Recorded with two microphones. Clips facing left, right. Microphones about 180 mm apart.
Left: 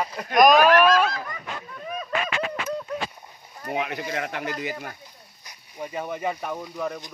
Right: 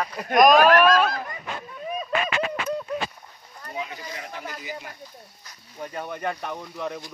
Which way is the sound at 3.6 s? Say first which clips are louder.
Left 6 dB; 75° left (ahead or behind).